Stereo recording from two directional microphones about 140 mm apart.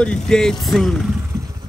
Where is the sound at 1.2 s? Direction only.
20° right (ahead or behind).